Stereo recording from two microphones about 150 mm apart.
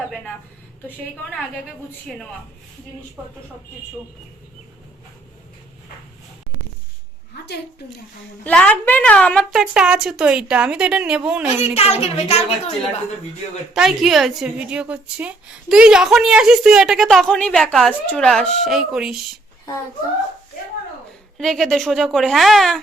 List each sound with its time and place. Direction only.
8.4 s a woman's voice: 10° left (ahead or behind)
9.6 s a woman's voice: 5° right (ahead or behind)
11.7 s a woman's voice: 45° left (ahead or behind)
13.7 s a woman's voice: centre (ahead or behind)
21.3 s a woman's voice: centre (ahead or behind)